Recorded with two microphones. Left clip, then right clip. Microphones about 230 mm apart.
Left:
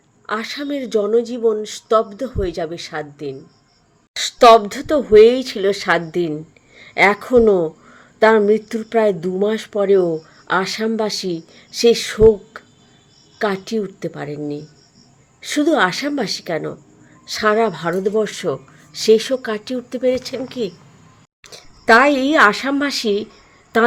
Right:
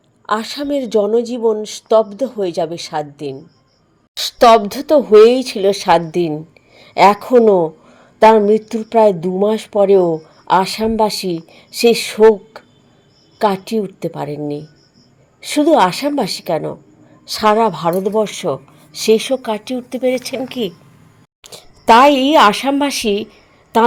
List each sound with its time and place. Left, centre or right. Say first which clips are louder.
0.3 s speech: right 5 dB; centre
20.0 s speech: right 1 dB; left
20.3 s speech: right 3 dB; centre
22.0 s speech: right 4 dB; centre